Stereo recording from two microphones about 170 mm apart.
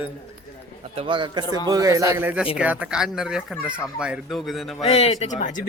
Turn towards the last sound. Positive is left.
turn(degrees=45)  # may be behind; listen again after turning